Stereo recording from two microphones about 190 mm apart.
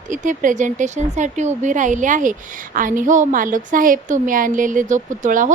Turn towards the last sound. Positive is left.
turn(degrees=-45)  # may be behind; listen again after turning